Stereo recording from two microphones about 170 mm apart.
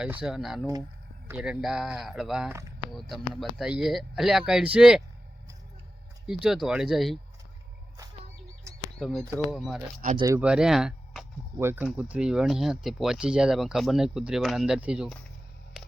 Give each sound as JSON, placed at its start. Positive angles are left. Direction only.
{"t": 0.0, "sound": "speech", "side_deg": -5}
{"t": 3.6, "sound": "speech", "side_deg": -5}
{"t": 6.2, "sound": "speech", "side_deg": 0}
{"t": 9.0, "sound": "speech", "side_deg": 0}
{"t": 10.2, "sound": "speech", "side_deg": -20}
{"t": 10.4, "sound": "speech", "side_deg": -5}
{"t": 11.6, "sound": "speech", "side_deg": -15}